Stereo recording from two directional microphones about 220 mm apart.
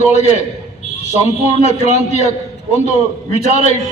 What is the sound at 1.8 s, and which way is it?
Speech, 30° left (ahead or behind).